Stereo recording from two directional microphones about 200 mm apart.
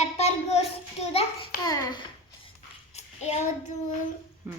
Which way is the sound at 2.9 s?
35° left (ahead or behind).